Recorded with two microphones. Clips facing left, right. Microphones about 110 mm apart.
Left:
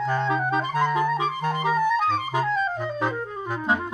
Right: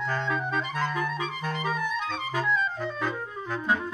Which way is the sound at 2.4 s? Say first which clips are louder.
Right 1 dB; 40° left (ahead or behind).